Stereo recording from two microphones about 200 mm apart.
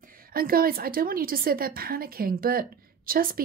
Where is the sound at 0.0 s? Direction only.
45° right (ahead or behind).